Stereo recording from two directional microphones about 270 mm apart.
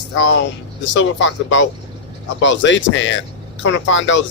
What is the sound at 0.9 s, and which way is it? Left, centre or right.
A man's voice, left.